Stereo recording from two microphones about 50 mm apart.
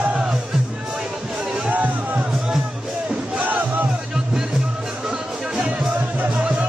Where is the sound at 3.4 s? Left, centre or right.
Right.